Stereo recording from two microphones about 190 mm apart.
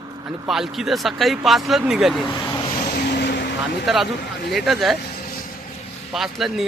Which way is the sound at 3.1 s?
65° left (ahead or behind).